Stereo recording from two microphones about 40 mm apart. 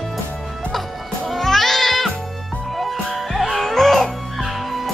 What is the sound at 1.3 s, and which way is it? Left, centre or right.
Music, centre.